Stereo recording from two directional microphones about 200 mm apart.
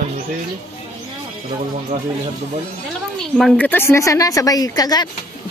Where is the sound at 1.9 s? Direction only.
30° right (ahead or behind).